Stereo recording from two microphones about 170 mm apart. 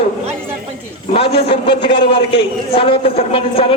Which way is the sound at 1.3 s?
75° left (ahead or behind).